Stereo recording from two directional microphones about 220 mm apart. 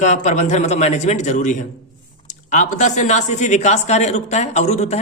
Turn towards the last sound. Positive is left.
turn(degrees=30)  # may be behind; listen again after turning